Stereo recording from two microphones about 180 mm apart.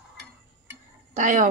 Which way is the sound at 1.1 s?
45° right (ahead or behind).